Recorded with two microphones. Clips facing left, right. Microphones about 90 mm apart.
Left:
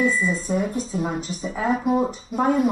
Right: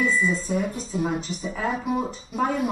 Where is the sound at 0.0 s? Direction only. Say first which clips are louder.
Left 1 dB; 5° left (ahead or behind).